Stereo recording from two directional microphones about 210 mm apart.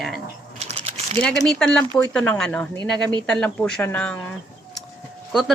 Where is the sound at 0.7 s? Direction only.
30° right (ahead or behind).